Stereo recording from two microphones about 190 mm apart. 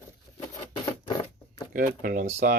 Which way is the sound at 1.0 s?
25° left (ahead or behind).